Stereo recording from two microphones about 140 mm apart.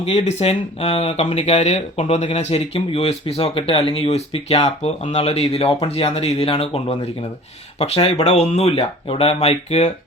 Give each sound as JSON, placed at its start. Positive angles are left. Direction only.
{"t": 0.0, "sound": "speech", "side_deg": 45}